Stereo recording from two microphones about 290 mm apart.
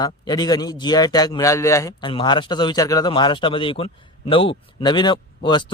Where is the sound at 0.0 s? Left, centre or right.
Centre.